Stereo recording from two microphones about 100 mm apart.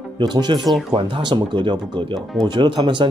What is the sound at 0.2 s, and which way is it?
Speech, 50° right (ahead or behind).